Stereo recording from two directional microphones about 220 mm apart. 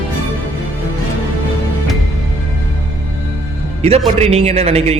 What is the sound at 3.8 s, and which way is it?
A man's voice, 30° right (ahead or behind).